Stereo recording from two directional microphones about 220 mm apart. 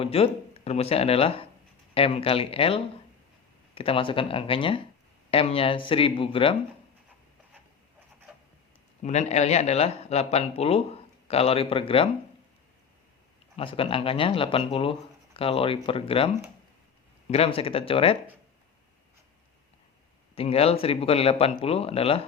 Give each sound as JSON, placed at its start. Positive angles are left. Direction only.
{"t": 0.0, "sound": "speech", "side_deg": 25}
{"t": 9.0, "sound": "speech", "side_deg": 30}
{"t": 13.6, "sound": "speech", "side_deg": 25}
{"t": 20.3, "sound": "speech", "side_deg": 25}